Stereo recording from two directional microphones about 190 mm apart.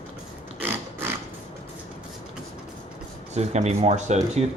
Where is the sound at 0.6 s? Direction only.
10° right (ahead or behind).